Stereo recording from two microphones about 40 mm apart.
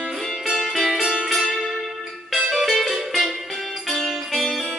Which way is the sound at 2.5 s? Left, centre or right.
Centre.